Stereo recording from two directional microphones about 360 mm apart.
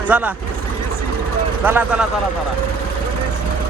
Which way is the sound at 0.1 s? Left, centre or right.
Centre.